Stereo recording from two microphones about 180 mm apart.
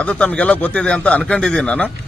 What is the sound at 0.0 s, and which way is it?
A man's voice, 5° left (ahead or behind).